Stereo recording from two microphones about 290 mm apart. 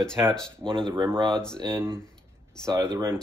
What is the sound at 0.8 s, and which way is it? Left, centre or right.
Speech, centre.